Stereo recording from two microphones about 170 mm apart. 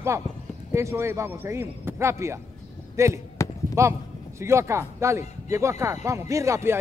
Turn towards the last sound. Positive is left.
turn(degrees=-15)  # may be behind; listen again after turning